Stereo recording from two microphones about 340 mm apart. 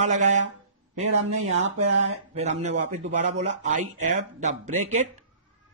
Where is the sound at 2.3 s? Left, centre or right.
Centre.